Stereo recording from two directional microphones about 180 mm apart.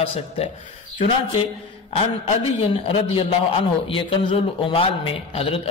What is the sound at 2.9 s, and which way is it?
A man's voice, 30° left (ahead or behind).